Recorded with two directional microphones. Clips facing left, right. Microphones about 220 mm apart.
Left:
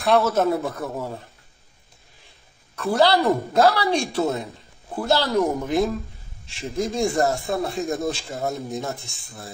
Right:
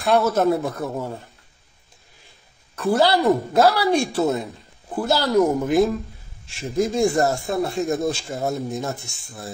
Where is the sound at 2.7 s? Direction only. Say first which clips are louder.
Right 1 dB; centre (ahead or behind).